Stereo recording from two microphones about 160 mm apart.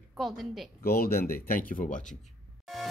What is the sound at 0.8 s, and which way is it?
A man's voice, 70° left (ahead or behind).